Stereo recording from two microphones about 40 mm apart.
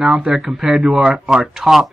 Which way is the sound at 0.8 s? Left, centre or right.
Right.